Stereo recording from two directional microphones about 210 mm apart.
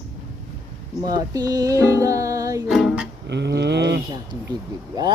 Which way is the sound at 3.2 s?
55° right (ahead or behind).